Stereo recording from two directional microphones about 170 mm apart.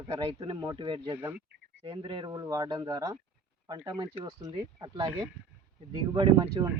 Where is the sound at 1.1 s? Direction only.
10° right (ahead or behind).